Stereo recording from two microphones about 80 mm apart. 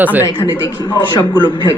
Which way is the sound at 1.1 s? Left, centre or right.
Left.